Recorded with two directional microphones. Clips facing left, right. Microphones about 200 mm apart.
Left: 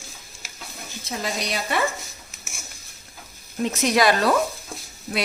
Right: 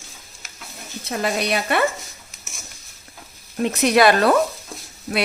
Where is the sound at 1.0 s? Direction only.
60° right (ahead or behind).